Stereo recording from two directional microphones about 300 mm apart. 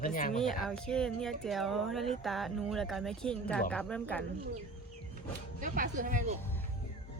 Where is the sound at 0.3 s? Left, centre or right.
Centre.